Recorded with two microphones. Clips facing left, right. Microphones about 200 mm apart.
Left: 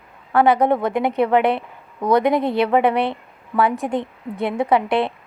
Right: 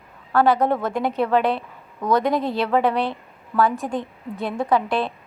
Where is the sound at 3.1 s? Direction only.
20° left (ahead or behind).